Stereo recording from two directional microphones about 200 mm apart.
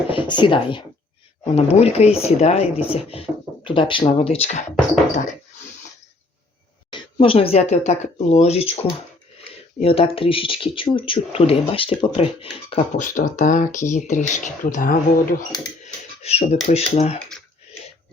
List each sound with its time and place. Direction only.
0.1 s speech: 25° left (ahead or behind)
6.9 s speech: 30° left (ahead or behind)
13.0 s speech: 40° left (ahead or behind)
16.2 s speech: 30° left (ahead or behind)